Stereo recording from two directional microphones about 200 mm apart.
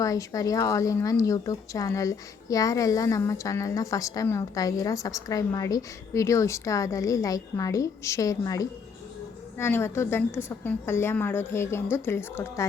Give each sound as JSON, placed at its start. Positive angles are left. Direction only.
{"t": 0.0, "sound": "speech", "side_deg": 15}